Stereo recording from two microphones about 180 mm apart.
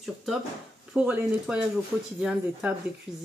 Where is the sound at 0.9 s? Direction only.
5° right (ahead or behind).